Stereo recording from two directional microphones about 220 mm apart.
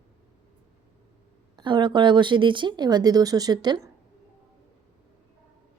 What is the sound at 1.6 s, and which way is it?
A woman's voice, 20° right (ahead or behind).